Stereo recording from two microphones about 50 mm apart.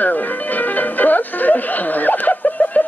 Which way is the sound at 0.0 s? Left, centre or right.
Left.